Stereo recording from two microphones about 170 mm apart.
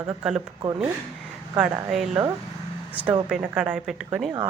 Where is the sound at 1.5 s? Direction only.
5° right (ahead or behind).